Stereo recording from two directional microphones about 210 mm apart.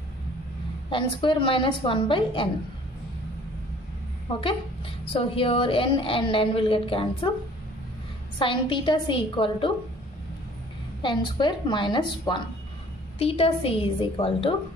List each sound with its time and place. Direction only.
0.8 s a woman's voice: 25° left (ahead or behind)
5.1 s a woman's voice: 25° left (ahead or behind)
8.4 s a woman's voice: 25° left (ahead or behind)
11.0 s a woman's voice: 20° left (ahead or behind)